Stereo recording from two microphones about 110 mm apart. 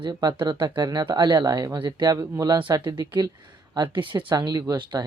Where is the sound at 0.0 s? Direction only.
40° right (ahead or behind).